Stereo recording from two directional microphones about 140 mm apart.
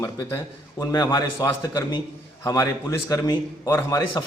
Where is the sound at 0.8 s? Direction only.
30° left (ahead or behind).